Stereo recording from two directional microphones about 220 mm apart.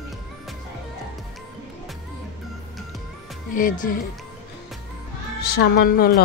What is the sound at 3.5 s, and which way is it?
Speech, 35° left (ahead or behind).